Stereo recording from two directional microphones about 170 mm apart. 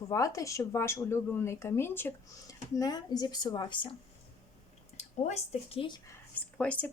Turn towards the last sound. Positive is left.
turn(degrees=10)  # may be behind; listen again after turning